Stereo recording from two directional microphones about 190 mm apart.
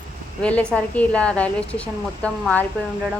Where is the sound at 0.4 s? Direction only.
5° left (ahead or behind).